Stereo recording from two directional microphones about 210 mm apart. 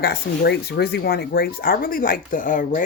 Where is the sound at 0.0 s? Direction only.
50° left (ahead or behind).